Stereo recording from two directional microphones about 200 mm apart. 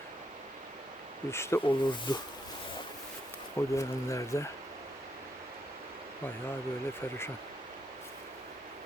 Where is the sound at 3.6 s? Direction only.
15° left (ahead or behind).